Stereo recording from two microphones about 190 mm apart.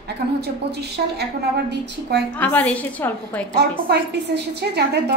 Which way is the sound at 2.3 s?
10° left (ahead or behind).